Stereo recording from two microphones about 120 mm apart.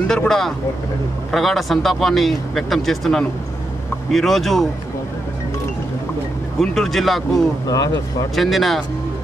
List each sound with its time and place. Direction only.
0.1 s speech: 5° left (ahead or behind)
6.6 s speech: 5° left (ahead or behind)
7.6 s speech: 30° left (ahead or behind)
8.4 s speech: centre (ahead or behind)